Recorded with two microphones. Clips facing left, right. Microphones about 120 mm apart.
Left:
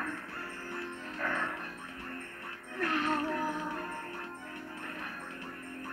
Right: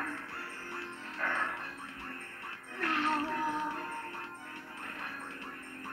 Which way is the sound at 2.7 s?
25° left (ahead or behind).